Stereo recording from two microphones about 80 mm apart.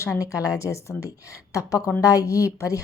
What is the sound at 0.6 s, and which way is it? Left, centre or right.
A woman's voice, left.